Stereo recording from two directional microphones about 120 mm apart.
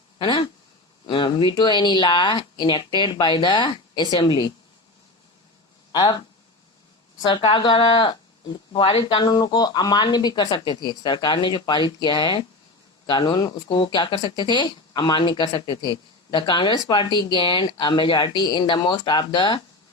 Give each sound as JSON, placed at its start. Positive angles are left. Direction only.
{"t": 0.2, "sound": "a sound", "side_deg": 40}
{"t": 1.0, "sound": "speech", "side_deg": 40}
{"t": 5.9, "sound": "speech", "side_deg": 35}
{"t": 7.4, "sound": "speech", "side_deg": 45}